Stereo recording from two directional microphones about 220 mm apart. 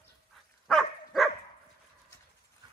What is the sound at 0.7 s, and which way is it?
Dog, centre (ahead or behind).